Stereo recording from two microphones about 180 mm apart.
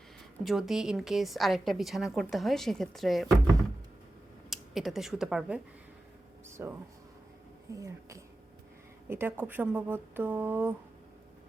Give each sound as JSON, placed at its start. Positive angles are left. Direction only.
{"t": 0.4, "sound": "a woman's voice", "side_deg": 0}
{"t": 4.4, "sound": "speech", "side_deg": 0}
{"t": 6.6, "sound": "speech", "side_deg": -10}